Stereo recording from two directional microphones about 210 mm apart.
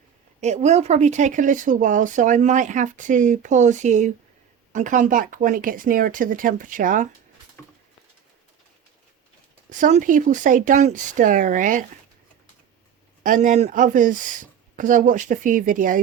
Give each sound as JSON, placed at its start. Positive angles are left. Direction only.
{"t": 0.4, "sound": "speech", "side_deg": -35}
{"t": 9.6, "sound": "speech", "side_deg": -35}
{"t": 13.2, "sound": "speech", "side_deg": -40}